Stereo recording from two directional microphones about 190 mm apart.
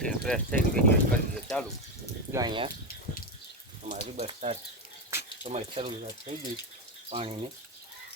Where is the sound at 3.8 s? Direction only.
40° right (ahead or behind).